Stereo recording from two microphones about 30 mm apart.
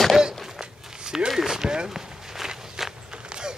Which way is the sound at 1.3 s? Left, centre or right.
Centre.